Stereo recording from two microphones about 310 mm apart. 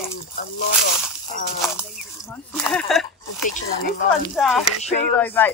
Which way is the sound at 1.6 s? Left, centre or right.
Centre.